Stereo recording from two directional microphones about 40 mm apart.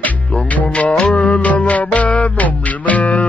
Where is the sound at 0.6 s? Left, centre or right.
Left.